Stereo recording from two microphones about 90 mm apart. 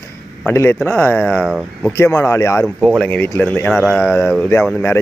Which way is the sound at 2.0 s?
30° left (ahead or behind).